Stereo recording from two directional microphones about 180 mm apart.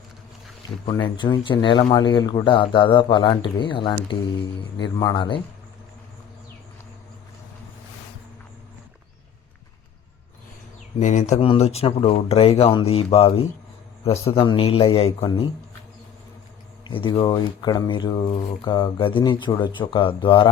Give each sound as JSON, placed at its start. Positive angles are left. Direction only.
{"t": 0.9, "sound": "speech", "side_deg": 25}
{"t": 11.0, "sound": "speech", "side_deg": 40}
{"t": 16.8, "sound": "speech", "side_deg": 30}